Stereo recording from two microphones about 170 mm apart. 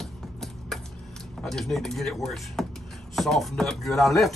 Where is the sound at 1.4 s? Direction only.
Centre (ahead or behind).